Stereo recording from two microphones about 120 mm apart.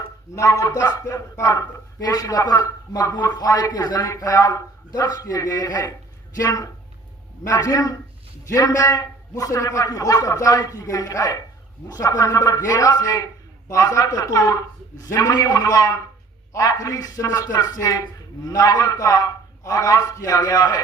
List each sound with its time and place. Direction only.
0.3 s a man's voice: 25° left (ahead or behind)